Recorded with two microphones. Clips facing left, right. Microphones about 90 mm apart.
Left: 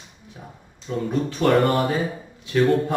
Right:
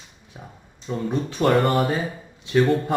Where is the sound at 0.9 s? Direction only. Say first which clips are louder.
Left 1 dB; 15° right (ahead or behind).